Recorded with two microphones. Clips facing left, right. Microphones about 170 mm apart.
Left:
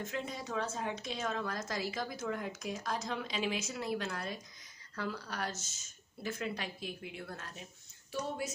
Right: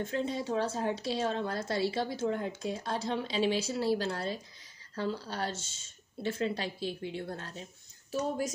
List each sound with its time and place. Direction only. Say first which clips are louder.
0.0 s a woman's voice: right 7 dB; 30° right (ahead or behind)
8.1 s speech: right 6 dB; 40° right (ahead or behind)